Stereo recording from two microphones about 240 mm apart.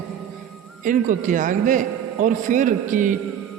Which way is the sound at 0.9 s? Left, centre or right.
Right.